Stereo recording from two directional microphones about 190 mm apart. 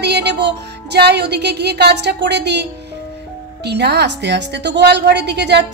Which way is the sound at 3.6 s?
60° right (ahead or behind).